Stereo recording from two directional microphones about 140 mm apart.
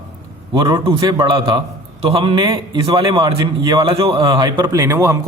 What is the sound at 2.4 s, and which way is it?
A man's voice, 25° right (ahead or behind).